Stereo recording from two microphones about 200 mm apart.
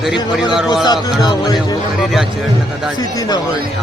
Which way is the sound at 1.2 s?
20° left (ahead or behind).